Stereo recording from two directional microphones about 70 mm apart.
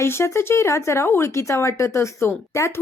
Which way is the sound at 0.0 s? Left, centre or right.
Left.